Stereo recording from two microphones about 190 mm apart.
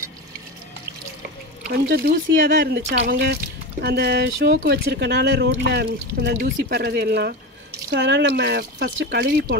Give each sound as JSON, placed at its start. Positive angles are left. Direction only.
{"t": 1.7, "sound": "speech", "side_deg": -55}
{"t": 7.9, "sound": "speech", "side_deg": -65}